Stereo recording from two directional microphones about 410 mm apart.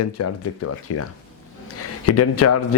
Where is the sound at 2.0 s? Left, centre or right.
Left.